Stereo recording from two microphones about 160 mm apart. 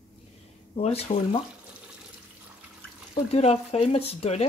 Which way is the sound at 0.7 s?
40° left (ahead or behind).